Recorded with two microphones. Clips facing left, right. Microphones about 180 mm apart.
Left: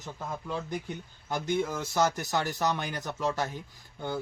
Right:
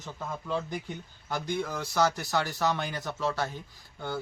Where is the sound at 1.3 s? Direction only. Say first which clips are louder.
Left 2 dB; 20° left (ahead or behind).